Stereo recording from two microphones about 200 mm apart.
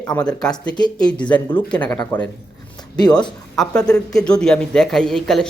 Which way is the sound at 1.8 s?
20° left (ahead or behind).